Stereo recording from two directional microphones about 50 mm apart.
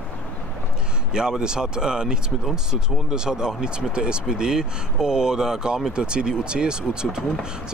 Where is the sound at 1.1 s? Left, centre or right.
Centre.